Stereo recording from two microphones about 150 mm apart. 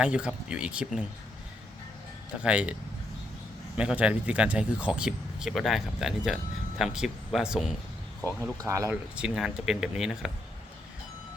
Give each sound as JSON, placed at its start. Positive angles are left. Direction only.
{"t": 0.0, "sound": "speech", "side_deg": -10}
{"t": 2.4, "sound": "speech", "side_deg": -10}
{"t": 3.8, "sound": "speech", "side_deg": -5}
{"t": 8.6, "sound": "speech", "side_deg": -20}
{"t": 9.1, "sound": "speech", "side_deg": -5}